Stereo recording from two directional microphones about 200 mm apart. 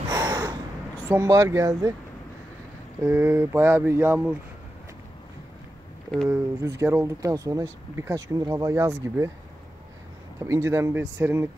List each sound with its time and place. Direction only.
0.1 s a sound: 15° right (ahead or behind)
1.0 s speech: 15° right (ahead or behind)
3.1 s speech: 10° right (ahead or behind)
6.2 s speech: 15° right (ahead or behind)
10.4 s speech: 15° right (ahead or behind)